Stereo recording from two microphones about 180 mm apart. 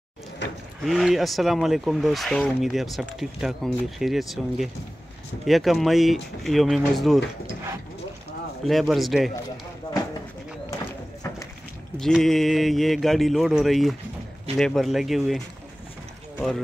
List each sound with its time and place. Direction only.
0.4 s a sound: 75° left (ahead or behind)
0.8 s speech: centre (ahead or behind)
8.6 s speech: centre (ahead or behind)
12.0 s speech: centre (ahead or behind)